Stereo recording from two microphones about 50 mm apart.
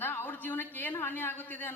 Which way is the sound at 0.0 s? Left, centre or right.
Left.